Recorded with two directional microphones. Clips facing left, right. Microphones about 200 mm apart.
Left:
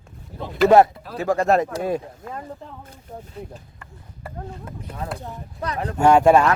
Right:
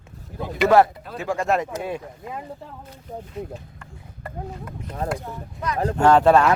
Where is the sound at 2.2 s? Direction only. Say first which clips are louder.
Even; 10° right (ahead or behind).